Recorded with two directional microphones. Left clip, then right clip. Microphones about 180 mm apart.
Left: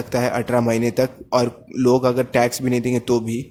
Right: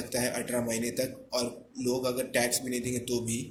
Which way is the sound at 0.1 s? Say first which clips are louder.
Left 12 dB; 40° left (ahead or behind).